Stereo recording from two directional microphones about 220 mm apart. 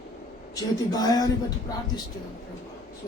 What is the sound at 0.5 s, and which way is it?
Speech, 15° left (ahead or behind).